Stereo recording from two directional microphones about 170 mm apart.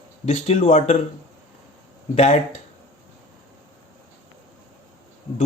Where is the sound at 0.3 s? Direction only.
35° left (ahead or behind).